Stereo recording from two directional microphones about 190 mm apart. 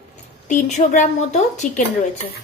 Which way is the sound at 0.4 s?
40° left (ahead or behind).